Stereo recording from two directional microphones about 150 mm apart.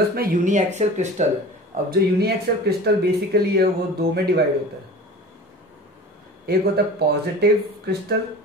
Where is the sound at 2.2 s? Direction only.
90° right.